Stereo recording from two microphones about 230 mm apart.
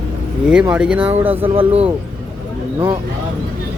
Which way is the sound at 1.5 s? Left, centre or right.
Right.